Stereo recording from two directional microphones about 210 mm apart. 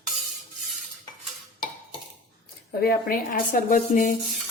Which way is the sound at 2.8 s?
45° left (ahead or behind).